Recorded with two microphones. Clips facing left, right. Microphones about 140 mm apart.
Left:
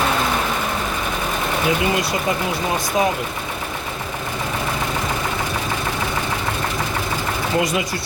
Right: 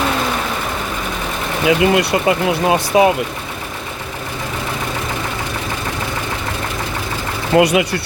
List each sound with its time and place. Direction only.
1.6 s speech: 80° right
7.5 s speech: 70° right (ahead or behind)